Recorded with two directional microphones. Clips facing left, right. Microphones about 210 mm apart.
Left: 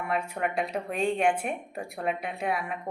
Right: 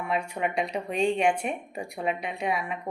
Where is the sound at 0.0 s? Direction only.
Centre (ahead or behind).